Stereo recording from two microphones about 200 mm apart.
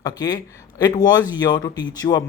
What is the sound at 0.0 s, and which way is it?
Speech, 20° left (ahead or behind).